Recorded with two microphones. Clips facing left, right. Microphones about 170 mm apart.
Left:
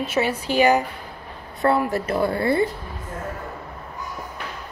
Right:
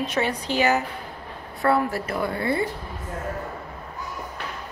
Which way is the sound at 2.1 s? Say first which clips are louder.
Left 6 dB; 35° left (ahead or behind).